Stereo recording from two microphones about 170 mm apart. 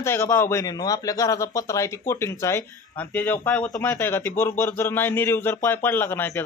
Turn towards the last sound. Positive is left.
turn(degrees=15)  # may be behind; listen again after turning